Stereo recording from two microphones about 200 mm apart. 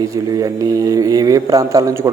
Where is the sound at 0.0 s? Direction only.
15° right (ahead or behind).